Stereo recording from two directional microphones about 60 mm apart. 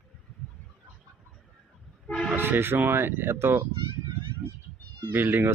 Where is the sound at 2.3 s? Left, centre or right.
Right.